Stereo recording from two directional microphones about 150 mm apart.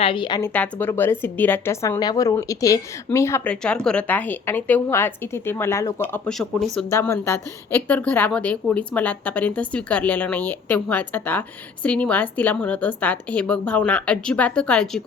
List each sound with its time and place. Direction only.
0.0 s a woman's voice: 35° left (ahead or behind)
0.4 s a woman's voice: 10° left (ahead or behind)
6.3 s speech: 5° left (ahead or behind)
6.9 s a woman's voice: 15° left (ahead or behind)